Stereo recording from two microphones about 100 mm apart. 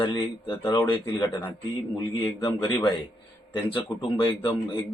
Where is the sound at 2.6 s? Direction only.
50° left (ahead or behind).